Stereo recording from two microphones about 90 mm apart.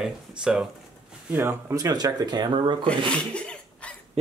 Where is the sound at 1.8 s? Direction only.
45° right (ahead or behind); by 2.9 s 70° right (ahead or behind).